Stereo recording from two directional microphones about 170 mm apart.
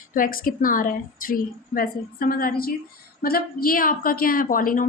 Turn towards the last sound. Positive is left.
turn(degrees=55)  # may be behind; listen again after turning